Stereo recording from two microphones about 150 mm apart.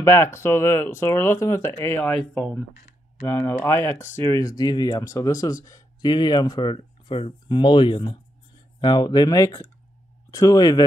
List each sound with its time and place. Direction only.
0.0 s speech: 15° left (ahead or behind)
2.0 s speech: 5° left (ahead or behind); by 10.8 s 25° left (ahead or behind)